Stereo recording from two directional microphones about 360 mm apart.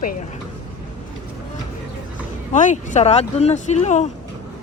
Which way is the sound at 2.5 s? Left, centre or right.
Centre.